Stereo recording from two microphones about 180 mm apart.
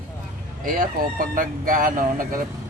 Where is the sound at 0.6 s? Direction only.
50° right (ahead or behind).